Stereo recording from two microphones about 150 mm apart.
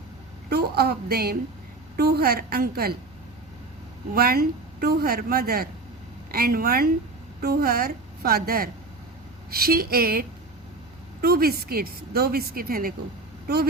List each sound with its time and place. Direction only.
0.5 s a woman's voice: 90° right
4.1 s a woman's voice: 90° right